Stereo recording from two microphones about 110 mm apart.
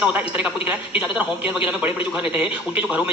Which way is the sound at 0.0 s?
15° right (ahead or behind).